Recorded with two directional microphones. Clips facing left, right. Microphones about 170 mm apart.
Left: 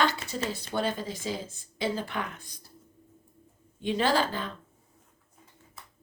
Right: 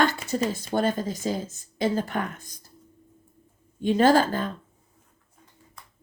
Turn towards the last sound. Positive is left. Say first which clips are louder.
# right 7 dB
turn(degrees=-45)  # may be behind; listen again after turning